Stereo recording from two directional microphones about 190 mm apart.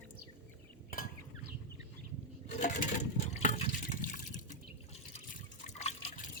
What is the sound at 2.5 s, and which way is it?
Coin, 40° left (ahead or behind).